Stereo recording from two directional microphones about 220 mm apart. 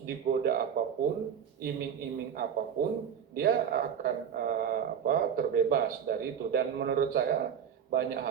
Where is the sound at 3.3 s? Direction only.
40° right (ahead or behind).